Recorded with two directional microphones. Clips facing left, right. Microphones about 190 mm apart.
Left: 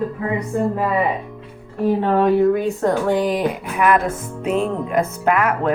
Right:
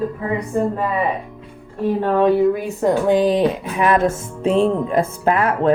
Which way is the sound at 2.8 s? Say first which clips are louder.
Right 5 dB; 20° right (ahead or behind).